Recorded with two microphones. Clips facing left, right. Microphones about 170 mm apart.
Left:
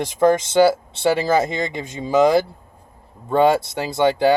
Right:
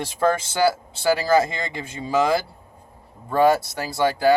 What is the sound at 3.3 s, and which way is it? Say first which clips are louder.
Speech: left 2 dB; 25° left (ahead or behind).